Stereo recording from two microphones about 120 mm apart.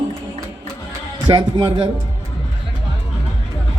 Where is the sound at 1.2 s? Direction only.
40° right (ahead or behind).